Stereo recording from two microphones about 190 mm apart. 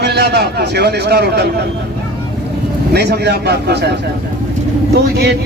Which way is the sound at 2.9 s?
60° right (ahead or behind).